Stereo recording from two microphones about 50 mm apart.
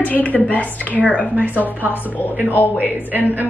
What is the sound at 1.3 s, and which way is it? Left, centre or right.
Speech, right.